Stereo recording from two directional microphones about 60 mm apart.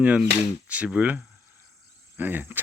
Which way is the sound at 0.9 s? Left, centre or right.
Right.